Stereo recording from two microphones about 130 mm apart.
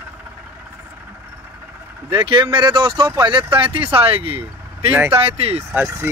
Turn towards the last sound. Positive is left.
turn(degrees=-15)  # may be behind; listen again after turning